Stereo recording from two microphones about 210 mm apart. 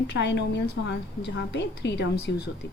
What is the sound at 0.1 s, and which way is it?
A woman's voice, 55° left (ahead or behind).